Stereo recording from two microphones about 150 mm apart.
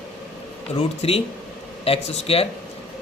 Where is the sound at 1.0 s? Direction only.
40° left (ahead or behind).